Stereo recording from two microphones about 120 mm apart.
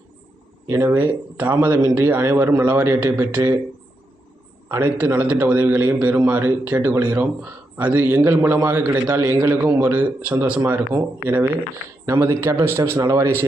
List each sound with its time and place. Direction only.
0.7 s a man's voice: 15° right (ahead or behind)
4.8 s a man's voice: 15° right (ahead or behind)
12.0 s a man's voice: 20° right (ahead or behind)